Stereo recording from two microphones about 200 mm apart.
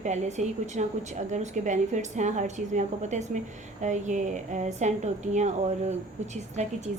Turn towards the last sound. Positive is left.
turn(degrees=-35)  # may be behind; listen again after turning